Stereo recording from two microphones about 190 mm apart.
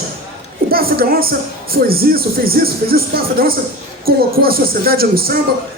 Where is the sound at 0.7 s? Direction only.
50° right (ahead or behind).